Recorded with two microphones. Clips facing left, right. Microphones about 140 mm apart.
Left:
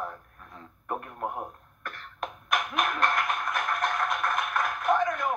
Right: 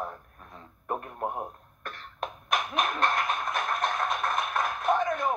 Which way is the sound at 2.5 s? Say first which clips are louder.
Even; 25° right (ahead or behind).